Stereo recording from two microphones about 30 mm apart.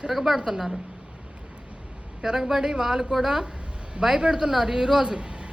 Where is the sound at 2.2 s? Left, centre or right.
Right.